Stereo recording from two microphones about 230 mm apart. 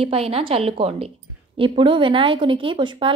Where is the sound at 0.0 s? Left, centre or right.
Right.